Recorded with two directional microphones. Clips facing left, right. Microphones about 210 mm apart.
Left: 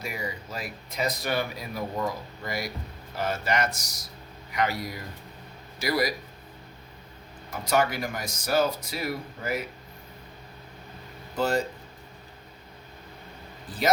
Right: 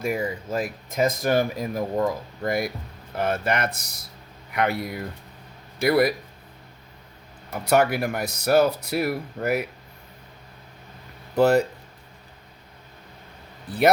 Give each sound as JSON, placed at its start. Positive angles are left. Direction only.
{"t": 0.0, "sound": "speech", "side_deg": -50}
{"t": 7.6, "sound": "speech", "side_deg": -60}
{"t": 11.3, "sound": "speech", "side_deg": -65}
{"t": 13.7, "sound": "speech", "side_deg": -65}